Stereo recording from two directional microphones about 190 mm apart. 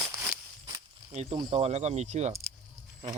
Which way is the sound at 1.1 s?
35° right (ahead or behind).